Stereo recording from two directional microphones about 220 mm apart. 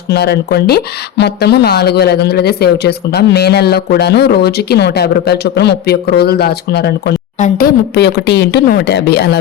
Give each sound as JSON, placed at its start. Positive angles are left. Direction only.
{"t": 0.1, "sound": "speech", "side_deg": 50}
{"t": 7.3, "sound": "speech", "side_deg": 35}
{"t": 7.9, "sound": "speech", "side_deg": 50}